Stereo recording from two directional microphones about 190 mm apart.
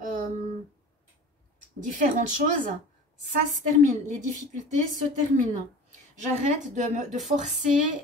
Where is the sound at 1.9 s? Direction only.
45° right (ahead or behind).